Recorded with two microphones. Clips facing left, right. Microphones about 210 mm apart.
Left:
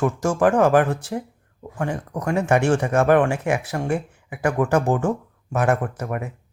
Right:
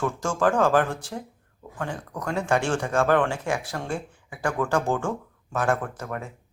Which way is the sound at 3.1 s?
10° left (ahead or behind).